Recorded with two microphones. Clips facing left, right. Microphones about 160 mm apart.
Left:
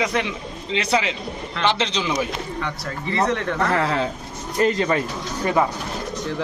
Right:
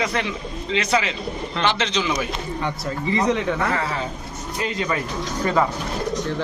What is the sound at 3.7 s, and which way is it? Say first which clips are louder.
Speech: left 4 dB; 80° left.